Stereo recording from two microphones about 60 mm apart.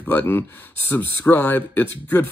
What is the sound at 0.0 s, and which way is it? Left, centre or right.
Speech, left.